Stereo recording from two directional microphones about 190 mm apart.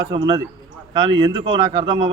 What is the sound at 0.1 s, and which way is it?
Speech, 25° right (ahead or behind).